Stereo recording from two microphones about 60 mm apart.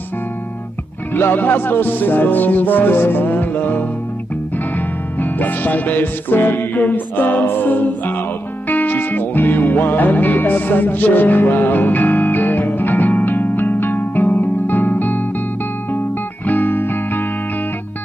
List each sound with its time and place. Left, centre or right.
1.1 s music: left
16.4 s music: left